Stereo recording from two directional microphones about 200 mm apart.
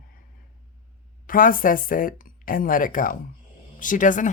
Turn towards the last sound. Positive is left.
turn(degrees=40)  # may be behind; listen again after turning